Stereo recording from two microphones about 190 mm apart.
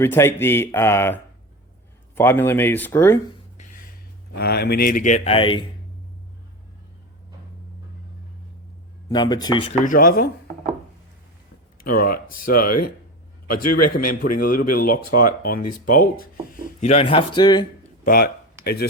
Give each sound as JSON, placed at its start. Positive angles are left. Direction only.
{"t": 0.0, "sound": "speech", "side_deg": 10}
{"t": 3.6, "sound": "music", "side_deg": 45}
{"t": 4.4, "sound": "a man's voice", "side_deg": 55}
{"t": 9.0, "sound": "speech", "side_deg": 20}
{"t": 9.8, "sound": "a man's voice", "side_deg": 45}
{"t": 11.8, "sound": "a man's voice", "side_deg": 50}
{"t": 13.9, "sound": "a man's voice", "side_deg": 50}
{"t": 16.8, "sound": "speech", "side_deg": 30}
{"t": 18.0, "sound": "speech", "side_deg": 50}